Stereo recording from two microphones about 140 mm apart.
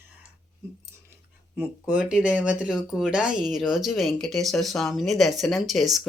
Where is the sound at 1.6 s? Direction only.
10° right (ahead or behind).